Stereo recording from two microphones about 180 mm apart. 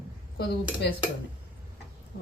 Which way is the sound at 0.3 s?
60° left (ahead or behind).